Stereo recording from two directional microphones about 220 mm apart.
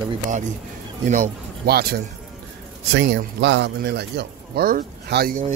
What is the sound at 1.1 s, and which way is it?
Speech, 40° right (ahead or behind).